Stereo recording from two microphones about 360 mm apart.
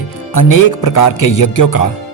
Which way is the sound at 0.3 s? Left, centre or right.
Left.